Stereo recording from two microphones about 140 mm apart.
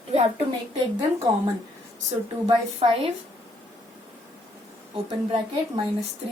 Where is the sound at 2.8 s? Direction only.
45° right (ahead or behind).